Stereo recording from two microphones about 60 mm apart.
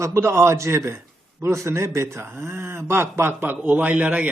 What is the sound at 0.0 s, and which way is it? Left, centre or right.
A man's voice, right.